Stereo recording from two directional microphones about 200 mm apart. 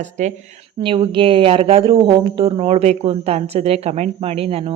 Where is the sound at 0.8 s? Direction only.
25° right (ahead or behind).